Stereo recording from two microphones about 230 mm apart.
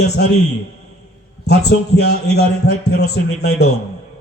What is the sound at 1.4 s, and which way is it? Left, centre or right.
A man's voice, left.